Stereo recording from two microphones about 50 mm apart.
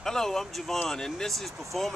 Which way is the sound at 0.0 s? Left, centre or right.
Centre.